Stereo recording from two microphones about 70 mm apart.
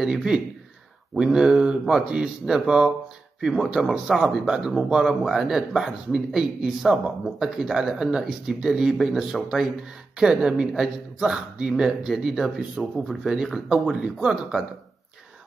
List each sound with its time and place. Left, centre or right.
0.0 s a man's voice: centre